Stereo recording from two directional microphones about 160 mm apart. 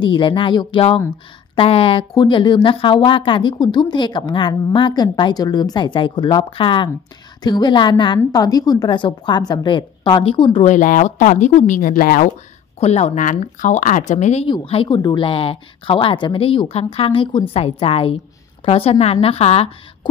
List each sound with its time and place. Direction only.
0.0 s speech: 30° left (ahead or behind)
10.6 s speech: 50° left (ahead or behind)
12.8 s speech: 40° left (ahead or behind)
14.5 s speech: 35° left (ahead or behind)